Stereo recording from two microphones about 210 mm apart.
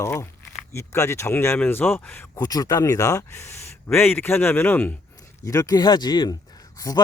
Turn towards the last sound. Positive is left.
turn(degrees=15)  # may be behind; listen again after turning